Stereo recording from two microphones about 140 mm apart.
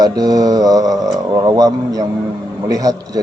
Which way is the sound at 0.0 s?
25° right (ahead or behind).